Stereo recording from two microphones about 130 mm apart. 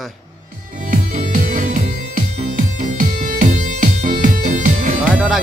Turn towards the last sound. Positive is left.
turn(degrees=-70)  # may be behind; listen again after turning